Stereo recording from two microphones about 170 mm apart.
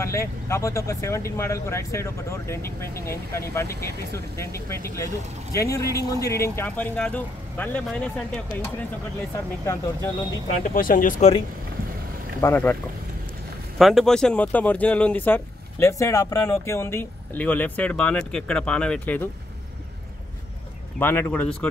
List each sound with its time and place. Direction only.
0.0 s speech: 15° left (ahead or behind)
10.6 s speech: 55° left (ahead or behind)
12.4 s speech: 15° left (ahead or behind)
13.7 s speech: centre (ahead or behind)
21.0 s speech: 10° left (ahead or behind)